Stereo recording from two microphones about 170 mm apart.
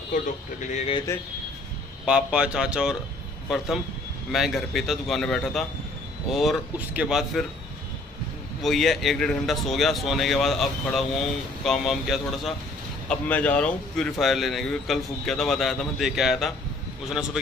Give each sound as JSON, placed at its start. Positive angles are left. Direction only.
{"t": 0.1, "sound": "speech", "side_deg": 45}
{"t": 2.0, "sound": "a man's voice", "side_deg": -5}
{"t": 8.6, "sound": "a man's voice", "side_deg": 0}